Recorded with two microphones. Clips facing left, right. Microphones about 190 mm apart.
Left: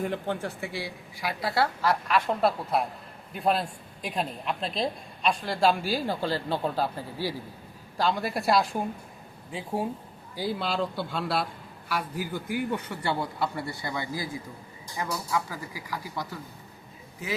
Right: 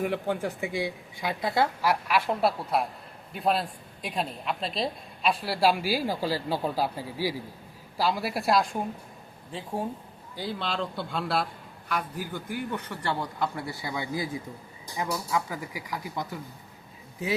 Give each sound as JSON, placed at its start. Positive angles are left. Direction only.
{"t": 0.0, "sound": "a woman's voice", "side_deg": -10}
{"t": 13.8, "sound": "a woman's voice", "side_deg": -15}